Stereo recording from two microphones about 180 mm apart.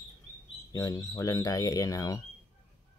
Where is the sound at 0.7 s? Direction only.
20° left (ahead or behind).